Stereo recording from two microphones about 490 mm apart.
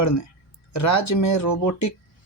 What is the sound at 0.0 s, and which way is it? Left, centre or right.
Speech, left.